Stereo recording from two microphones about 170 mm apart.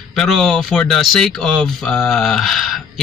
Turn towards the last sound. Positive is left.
turn(degrees=0)  # may be behind; listen again after turning